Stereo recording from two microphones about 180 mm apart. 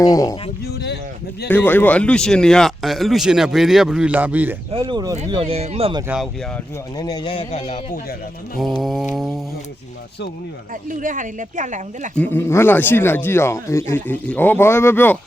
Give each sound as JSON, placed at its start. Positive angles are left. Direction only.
{"t": 0.0, "sound": "speech", "side_deg": 20}
{"t": 0.6, "sound": "a sound", "side_deg": 70}
{"t": 1.5, "sound": "speech", "side_deg": 10}
{"t": 4.7, "sound": "speech", "side_deg": -25}
{"t": 6.9, "sound": "speech", "side_deg": 20}
{"t": 8.8, "sound": "speech", "side_deg": 0}
{"t": 10.8, "sound": "speech", "side_deg": -45}
{"t": 12.1, "sound": "speech", "side_deg": 10}